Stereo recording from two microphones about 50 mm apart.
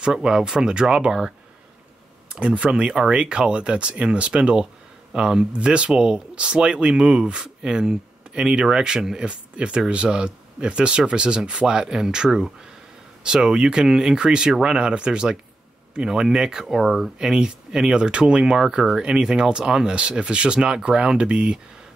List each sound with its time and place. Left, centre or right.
0.0 s speech: centre
2.4 s speech: right